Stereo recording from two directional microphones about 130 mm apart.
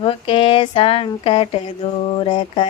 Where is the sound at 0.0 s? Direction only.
45° left (ahead or behind).